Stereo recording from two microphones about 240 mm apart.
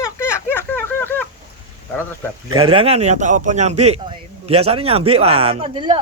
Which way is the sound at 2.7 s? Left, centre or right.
Right.